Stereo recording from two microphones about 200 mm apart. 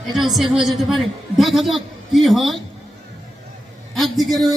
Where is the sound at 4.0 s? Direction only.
Centre (ahead or behind).